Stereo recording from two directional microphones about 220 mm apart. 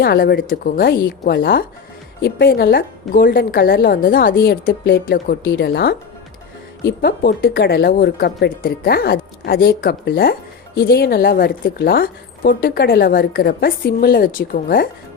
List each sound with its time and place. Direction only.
0.0 s a woman's voice: 45° left (ahead or behind)